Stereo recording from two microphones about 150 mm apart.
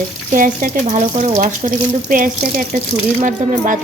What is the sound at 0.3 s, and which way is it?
Speech, 65° right (ahead or behind).